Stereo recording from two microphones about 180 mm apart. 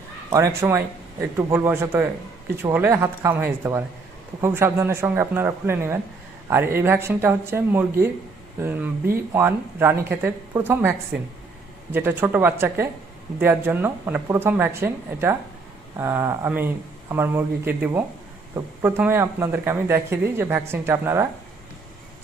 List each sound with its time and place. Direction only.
0.3 s speech: 15° right (ahead or behind)